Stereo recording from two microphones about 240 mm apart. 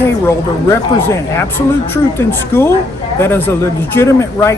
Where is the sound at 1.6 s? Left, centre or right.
Centre.